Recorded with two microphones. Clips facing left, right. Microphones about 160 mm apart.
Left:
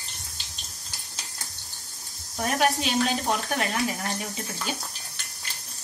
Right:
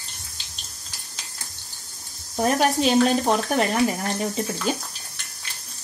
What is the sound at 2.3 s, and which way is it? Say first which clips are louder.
Speech: right 4 dB; 40° right (ahead or behind).